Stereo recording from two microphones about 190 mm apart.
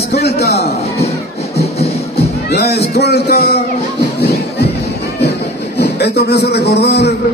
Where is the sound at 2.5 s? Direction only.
60° left (ahead or behind).